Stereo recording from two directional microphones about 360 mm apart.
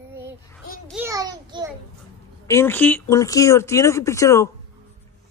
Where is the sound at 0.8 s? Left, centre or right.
Centre.